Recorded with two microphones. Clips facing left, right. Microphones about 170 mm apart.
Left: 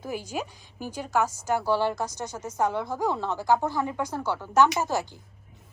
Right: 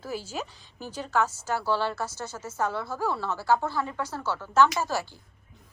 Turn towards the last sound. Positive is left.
turn(degrees=15)  # may be behind; listen again after turning